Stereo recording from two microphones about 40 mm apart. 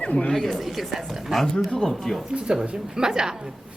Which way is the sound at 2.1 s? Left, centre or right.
Centre.